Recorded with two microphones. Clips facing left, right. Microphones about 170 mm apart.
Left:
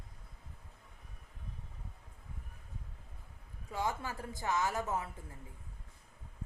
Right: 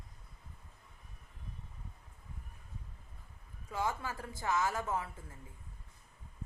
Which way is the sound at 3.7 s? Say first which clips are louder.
Even; 20° left (ahead or behind).